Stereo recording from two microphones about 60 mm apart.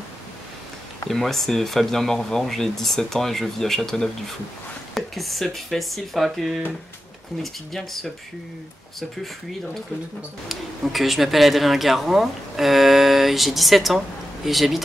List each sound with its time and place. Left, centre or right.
1.0 s speech: centre
10.5 s speech: centre